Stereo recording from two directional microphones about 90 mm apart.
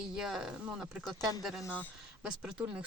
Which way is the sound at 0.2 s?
5° right (ahead or behind).